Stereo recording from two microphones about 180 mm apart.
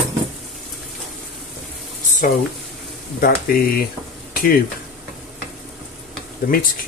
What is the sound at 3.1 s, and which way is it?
Speech, 55° left (ahead or behind).